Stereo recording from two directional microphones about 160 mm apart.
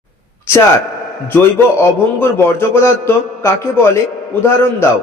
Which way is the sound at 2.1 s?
15° left (ahead or behind).